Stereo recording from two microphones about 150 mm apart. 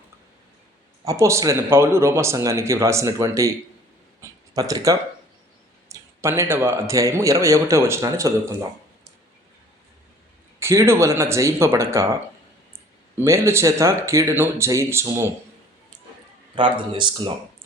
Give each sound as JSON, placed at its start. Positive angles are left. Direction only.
{"t": 1.0, "sound": "a man's voice", "side_deg": -20}
{"t": 4.2, "sound": "a sound", "side_deg": -20}
{"t": 5.9, "sound": "a man's voice", "side_deg": -15}
{"t": 10.6, "sound": "a man's voice", "side_deg": -20}
{"t": 13.1, "sound": "a man's voice", "side_deg": -20}
{"t": 16.6, "sound": "speech", "side_deg": -35}